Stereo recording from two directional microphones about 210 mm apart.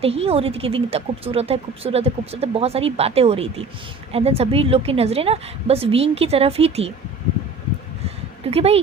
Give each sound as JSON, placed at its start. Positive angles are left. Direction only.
{"t": 0.0, "sound": "a woman's voice", "side_deg": -30}
{"t": 8.4, "sound": "a woman's voice", "side_deg": -30}